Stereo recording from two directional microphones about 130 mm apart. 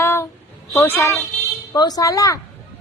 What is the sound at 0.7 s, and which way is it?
Speech, 15° left (ahead or behind).